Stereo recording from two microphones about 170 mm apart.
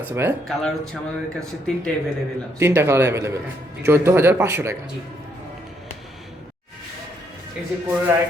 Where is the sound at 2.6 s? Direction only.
15° right (ahead or behind).